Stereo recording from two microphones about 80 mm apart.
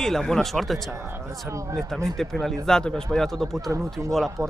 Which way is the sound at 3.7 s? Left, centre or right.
Right.